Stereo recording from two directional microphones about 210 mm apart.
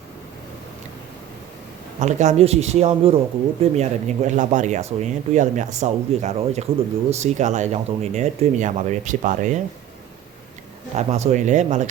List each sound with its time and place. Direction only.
2.0 s speech: 35° right (ahead or behind)
10.9 s speech: 30° right (ahead or behind)